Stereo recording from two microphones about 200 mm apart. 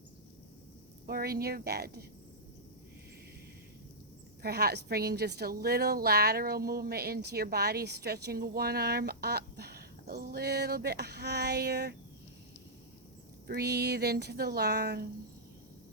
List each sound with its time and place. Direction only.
1.0 s a woman's voice: 50° right (ahead or behind)
4.4 s a woman's voice: 50° right (ahead or behind)
13.5 s a woman's voice: 55° right (ahead or behind)